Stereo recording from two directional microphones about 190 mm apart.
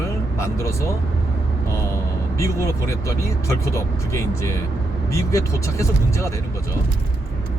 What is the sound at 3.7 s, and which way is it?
Speech, 15° left (ahead or behind).